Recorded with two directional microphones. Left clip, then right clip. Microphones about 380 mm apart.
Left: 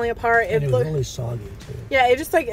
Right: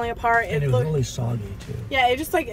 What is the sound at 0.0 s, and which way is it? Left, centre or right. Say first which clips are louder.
Speech: left 2 dB; centre.